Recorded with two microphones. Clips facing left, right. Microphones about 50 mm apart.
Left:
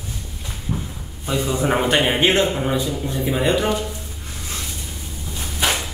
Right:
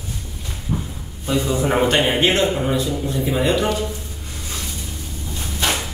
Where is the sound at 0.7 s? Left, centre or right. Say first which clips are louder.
Right 2 dB; centre.